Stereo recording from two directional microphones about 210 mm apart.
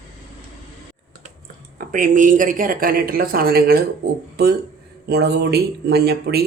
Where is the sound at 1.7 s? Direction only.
40° right (ahead or behind).